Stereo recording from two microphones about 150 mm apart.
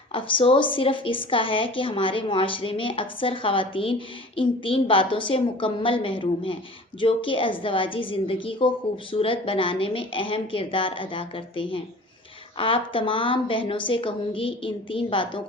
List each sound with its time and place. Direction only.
0.1 s a woman's voice: 35° left (ahead or behind)